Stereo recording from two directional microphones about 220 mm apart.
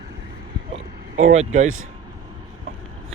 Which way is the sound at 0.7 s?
25° right (ahead or behind).